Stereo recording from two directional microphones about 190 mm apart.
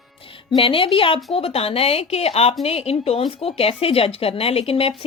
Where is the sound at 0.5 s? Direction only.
30° left (ahead or behind).